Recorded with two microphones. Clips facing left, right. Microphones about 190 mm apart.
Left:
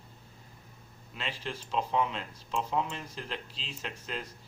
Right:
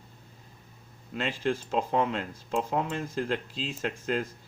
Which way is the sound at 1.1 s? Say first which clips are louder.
Right 9 dB; 50° right (ahead or behind).